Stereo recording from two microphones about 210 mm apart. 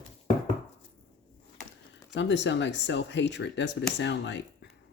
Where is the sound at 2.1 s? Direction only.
60° left (ahead or behind).